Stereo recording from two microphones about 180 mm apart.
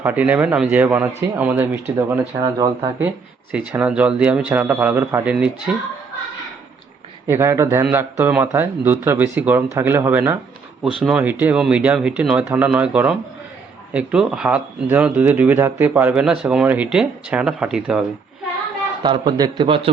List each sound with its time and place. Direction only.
0.0 s a man's voice: 10° right (ahead or behind)
3.5 s speech: 5° right (ahead or behind)
7.3 s speech: 15° right (ahead or behind)
19.0 s a man's voice: 25° right (ahead or behind)